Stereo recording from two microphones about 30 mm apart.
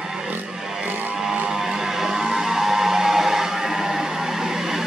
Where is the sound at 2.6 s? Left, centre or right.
Centre.